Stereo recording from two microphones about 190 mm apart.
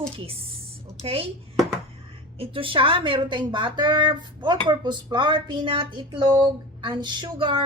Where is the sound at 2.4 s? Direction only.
30° right (ahead or behind).